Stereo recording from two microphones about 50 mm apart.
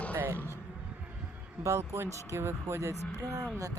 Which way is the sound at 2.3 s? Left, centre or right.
Right.